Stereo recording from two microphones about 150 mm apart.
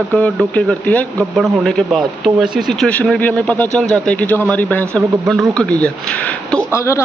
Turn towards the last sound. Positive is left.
turn(degrees=20)  # may be behind; listen again after turning